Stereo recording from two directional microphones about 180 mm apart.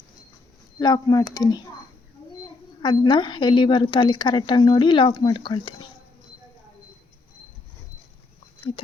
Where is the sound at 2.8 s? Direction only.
25° left (ahead or behind).